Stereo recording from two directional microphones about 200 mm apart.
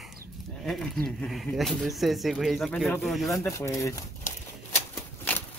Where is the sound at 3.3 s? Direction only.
15° left (ahead or behind).